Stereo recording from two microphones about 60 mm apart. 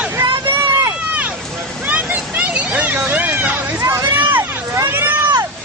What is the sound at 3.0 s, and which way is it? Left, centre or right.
Run, right.